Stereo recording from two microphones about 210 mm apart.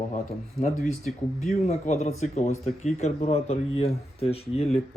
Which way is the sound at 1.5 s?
30° left (ahead or behind).